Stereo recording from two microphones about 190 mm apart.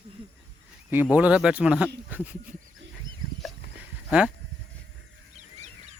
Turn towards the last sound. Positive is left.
turn(degrees=-35)  # may be behind; listen again after turning